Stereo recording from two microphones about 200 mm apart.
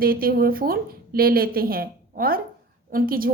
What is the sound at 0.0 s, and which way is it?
A woman's voice, 45° right (ahead or behind).